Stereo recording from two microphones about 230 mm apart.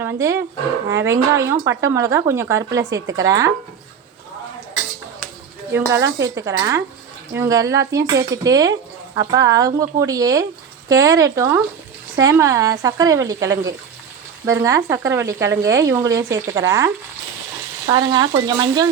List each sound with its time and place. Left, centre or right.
0.0 s speech: centre
5.7 s speech: centre